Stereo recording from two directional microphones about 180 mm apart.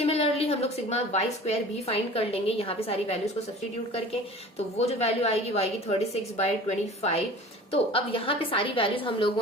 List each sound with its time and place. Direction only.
0.0 s a woman's voice: 35° left (ahead or behind)
4.9 s a woman's voice: 35° left (ahead or behind)